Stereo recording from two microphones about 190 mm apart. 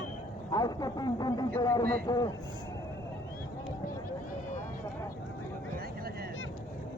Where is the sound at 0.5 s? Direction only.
20° left (ahead or behind).